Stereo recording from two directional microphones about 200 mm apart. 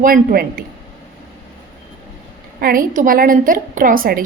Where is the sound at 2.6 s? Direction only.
45° right (ahead or behind).